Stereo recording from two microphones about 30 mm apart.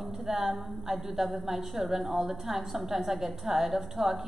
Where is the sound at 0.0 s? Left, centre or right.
Centre.